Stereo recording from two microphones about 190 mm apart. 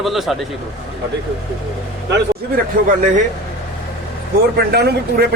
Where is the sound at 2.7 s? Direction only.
50° right (ahead or behind).